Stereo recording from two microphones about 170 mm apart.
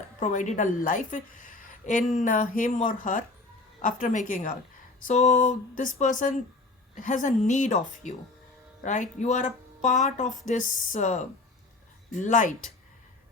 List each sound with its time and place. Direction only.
0.2 s a woman's voice: 45° left (ahead or behind)